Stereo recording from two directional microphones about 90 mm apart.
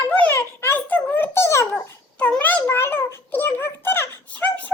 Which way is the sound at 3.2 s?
20° left (ahead or behind).